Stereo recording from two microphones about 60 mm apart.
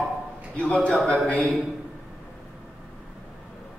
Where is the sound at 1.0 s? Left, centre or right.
Centre.